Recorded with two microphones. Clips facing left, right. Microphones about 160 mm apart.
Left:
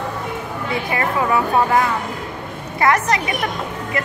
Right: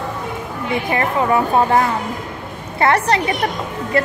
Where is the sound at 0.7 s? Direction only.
25° right (ahead or behind).